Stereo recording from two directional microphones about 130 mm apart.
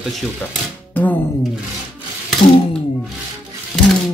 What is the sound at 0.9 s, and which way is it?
Speech, 15° left (ahead or behind).